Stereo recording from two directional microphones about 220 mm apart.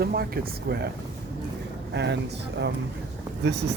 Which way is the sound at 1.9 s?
50° right (ahead or behind).